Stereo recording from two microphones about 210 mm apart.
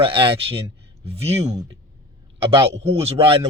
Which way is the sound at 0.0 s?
25° right (ahead or behind).